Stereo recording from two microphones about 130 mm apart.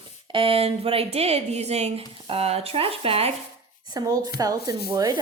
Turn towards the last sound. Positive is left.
turn(degrees=-30)  # may be behind; listen again after turning